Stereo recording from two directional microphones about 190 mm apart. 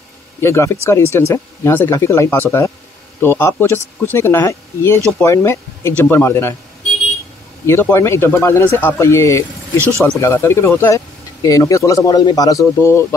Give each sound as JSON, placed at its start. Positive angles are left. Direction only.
{"t": 0.4, "sound": "speech", "side_deg": 15}
{"t": 7.6, "sound": "speech", "side_deg": 15}